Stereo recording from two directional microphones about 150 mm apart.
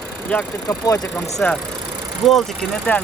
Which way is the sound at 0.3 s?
10° left (ahead or behind).